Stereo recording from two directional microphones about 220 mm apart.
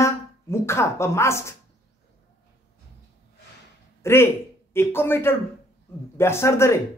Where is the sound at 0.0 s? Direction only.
10° left (ahead or behind).